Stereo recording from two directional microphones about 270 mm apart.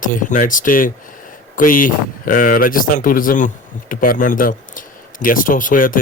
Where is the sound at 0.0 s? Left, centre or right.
Left.